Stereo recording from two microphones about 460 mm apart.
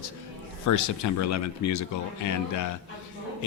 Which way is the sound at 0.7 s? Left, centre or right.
Left.